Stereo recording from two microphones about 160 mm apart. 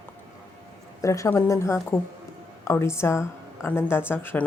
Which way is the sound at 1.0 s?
20° left (ahead or behind).